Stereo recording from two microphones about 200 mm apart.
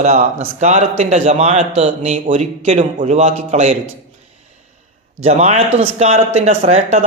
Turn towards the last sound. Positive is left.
turn(degrees=-35)  # may be behind; listen again after turning